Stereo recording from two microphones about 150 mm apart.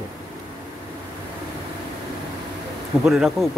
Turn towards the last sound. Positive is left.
turn(degrees=-5)  # may be behind; listen again after turning